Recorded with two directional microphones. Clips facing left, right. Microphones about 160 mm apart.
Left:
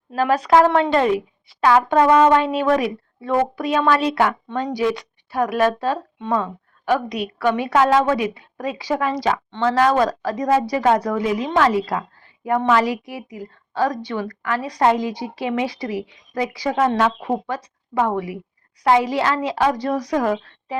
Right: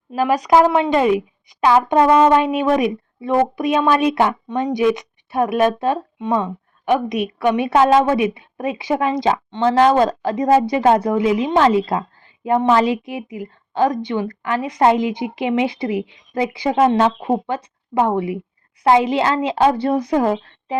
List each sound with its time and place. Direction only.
0.1 s a woman's voice: 10° right (ahead or behind); by 20.7 s 25° right (ahead or behind)